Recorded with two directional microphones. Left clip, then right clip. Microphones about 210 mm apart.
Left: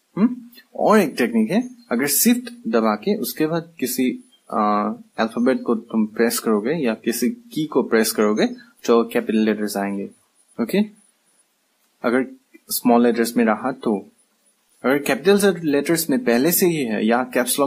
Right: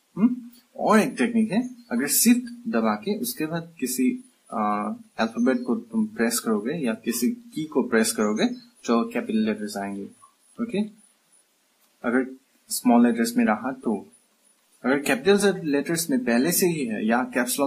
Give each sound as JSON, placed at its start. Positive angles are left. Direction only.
{"t": 0.8, "sound": "speech", "side_deg": 45}
{"t": 12.0, "sound": "speech", "side_deg": 45}